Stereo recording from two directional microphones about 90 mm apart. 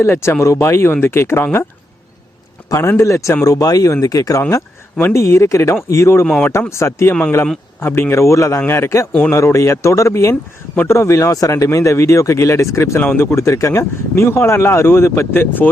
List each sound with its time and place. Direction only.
0.0 s speech: 30° left (ahead or behind)
2.6 s a man's voice: 30° left (ahead or behind)